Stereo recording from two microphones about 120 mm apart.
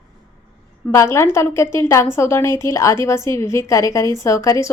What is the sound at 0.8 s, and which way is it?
A woman's voice, 20° left (ahead or behind).